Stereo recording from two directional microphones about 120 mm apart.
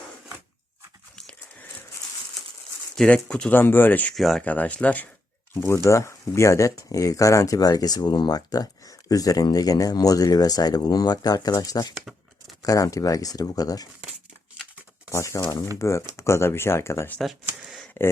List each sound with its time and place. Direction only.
2.9 s speech: 5° left (ahead or behind)
3.5 s speech: 15° left (ahead or behind)
4.1 s speech: centre (ahead or behind)
4.4 s speech: 15° left (ahead or behind)
5.5 s speech: 25° left (ahead or behind)
15.1 s speech: 25° left (ahead or behind)
17.4 s a sound: 5° right (ahead or behind)